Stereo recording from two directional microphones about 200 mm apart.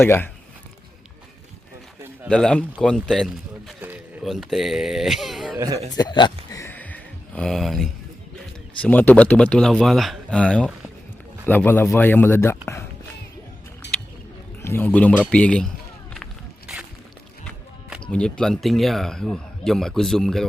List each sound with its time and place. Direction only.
0.0 s speech: 10° left (ahead or behind)
2.3 s speech: 5° left (ahead or behind)
3.8 s speech: 10° right (ahead or behind)
5.5 s speech: 15° right (ahead or behind)
5.9 s a man's voice: 20° left (ahead or behind)
6.5 s a sound: 15° left (ahead or behind)
8.8 s speech: 10° left (ahead or behind)
13.8 s a sound: 60° left (ahead or behind)
14.6 s speech: 10° left (ahead or behind)
16.1 s walk: centre (ahead or behind)
17.4 s a sound: 5° right (ahead or behind)
18.1 s speech: 5° left (ahead or behind)